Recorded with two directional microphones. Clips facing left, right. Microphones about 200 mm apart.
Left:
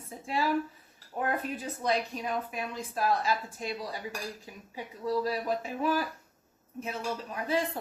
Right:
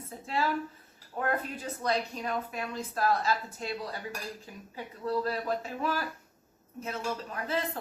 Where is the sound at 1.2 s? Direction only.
15° left (ahead or behind).